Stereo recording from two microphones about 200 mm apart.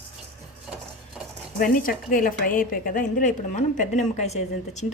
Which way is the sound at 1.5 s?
45° left (ahead or behind).